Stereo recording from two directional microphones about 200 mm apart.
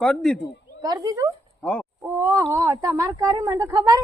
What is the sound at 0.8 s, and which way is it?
Speech, 15° right (ahead or behind).